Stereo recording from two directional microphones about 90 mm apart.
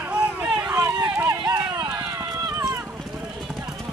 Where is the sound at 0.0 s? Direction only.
15° right (ahead or behind).